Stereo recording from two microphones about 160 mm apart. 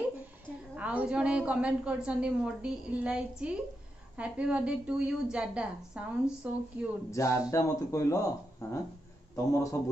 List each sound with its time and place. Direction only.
0.7 s a woman's voice: 10° right (ahead or behind)
7.1 s a man's voice: 20° left (ahead or behind)